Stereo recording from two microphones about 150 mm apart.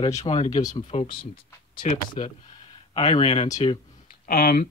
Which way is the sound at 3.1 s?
40° left (ahead or behind).